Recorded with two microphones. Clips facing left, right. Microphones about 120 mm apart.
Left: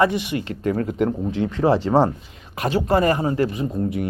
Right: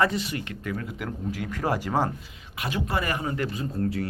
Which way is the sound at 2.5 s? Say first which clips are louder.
Left 9 dB; 40° left (ahead or behind).